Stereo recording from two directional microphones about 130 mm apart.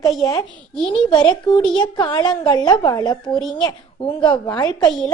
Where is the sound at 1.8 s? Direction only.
35° left (ahead or behind).